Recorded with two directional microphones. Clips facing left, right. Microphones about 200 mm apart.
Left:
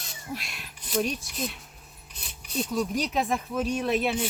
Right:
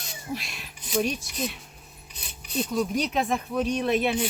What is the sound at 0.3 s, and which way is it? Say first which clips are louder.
Speech: right 2 dB; centre (ahead or behind).